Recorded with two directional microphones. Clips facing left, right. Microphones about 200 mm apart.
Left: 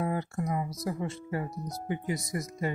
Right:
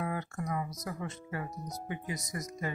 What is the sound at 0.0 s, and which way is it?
Speech, 30° left (ahead or behind).